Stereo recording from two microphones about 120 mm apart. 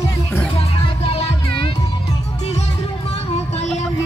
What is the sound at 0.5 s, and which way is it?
Music, 55° left (ahead or behind).